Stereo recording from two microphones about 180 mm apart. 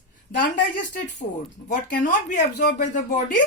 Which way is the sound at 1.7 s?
45° left (ahead or behind).